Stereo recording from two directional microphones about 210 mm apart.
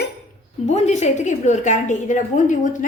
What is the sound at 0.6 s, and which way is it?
A woman's voice, 30° left (ahead or behind).